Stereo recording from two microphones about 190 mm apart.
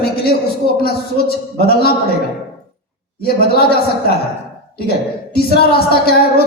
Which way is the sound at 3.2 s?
55° left (ahead or behind).